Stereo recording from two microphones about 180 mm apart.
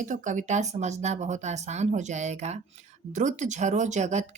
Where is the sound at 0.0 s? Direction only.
45° right (ahead or behind).